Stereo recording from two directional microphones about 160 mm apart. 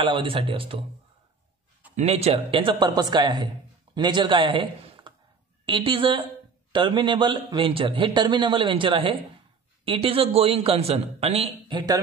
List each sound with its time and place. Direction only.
0.0 s a man's voice: 30° right (ahead or behind)
2.0 s a man's voice: 40° right (ahead or behind)